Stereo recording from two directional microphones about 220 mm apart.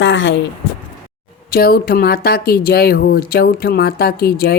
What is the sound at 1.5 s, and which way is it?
A woman's voice, 45° left (ahead or behind).